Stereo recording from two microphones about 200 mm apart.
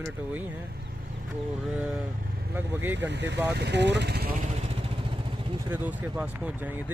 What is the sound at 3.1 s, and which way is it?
Speech, 60° right (ahead or behind).